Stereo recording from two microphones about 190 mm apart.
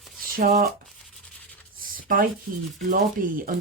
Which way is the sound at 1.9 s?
45° right (ahead or behind).